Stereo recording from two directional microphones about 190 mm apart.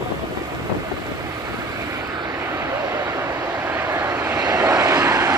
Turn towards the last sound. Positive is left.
turn(degrees=-15)  # may be behind; listen again after turning